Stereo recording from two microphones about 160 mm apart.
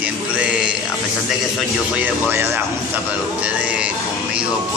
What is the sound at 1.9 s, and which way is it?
Speech, 15° right (ahead or behind).